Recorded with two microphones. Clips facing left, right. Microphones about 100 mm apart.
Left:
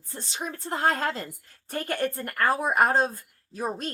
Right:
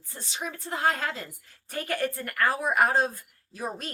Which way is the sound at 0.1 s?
30° left (ahead or behind).